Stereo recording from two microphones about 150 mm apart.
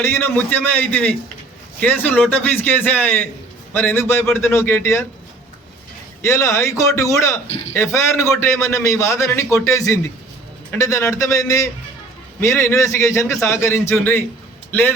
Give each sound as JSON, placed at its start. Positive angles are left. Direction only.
{"t": 0.0, "sound": "a man's voice", "side_deg": 15}
{"t": 6.2, "sound": "a man's voice", "side_deg": 20}